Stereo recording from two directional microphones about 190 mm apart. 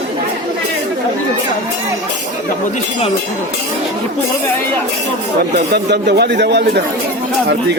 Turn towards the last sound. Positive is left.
turn(degrees=-65)  # may be behind; listen again after turning